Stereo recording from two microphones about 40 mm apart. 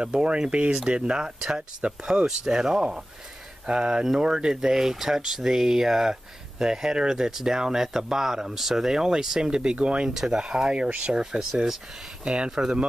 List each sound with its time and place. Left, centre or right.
0.0 s speech: right